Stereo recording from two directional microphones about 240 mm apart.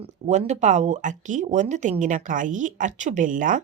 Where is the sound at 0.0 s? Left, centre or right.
Right.